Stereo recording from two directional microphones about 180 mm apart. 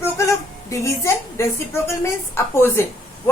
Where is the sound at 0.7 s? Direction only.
15° left (ahead or behind).